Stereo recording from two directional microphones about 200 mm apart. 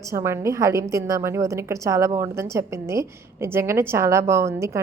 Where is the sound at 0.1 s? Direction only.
15° right (ahead or behind).